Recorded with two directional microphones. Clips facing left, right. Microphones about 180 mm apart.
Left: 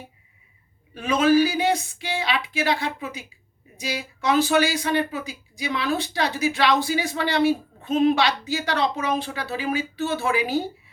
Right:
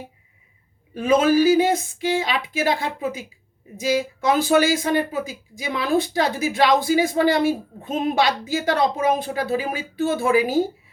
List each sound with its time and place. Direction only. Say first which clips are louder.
0.9 s speech: right 2 dB; 50° right (ahead or behind)